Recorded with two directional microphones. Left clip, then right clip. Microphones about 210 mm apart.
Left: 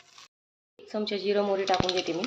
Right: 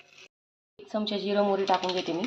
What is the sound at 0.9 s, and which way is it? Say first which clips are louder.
Speech: even; 5° left (ahead or behind).